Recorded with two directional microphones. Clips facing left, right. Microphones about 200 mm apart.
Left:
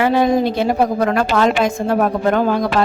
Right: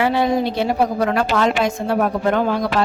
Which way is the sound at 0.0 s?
45° left (ahead or behind).